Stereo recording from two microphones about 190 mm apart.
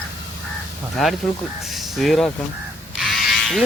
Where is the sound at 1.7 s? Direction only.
Centre (ahead or behind).